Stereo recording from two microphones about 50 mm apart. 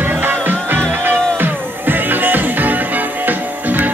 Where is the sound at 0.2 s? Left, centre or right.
Right.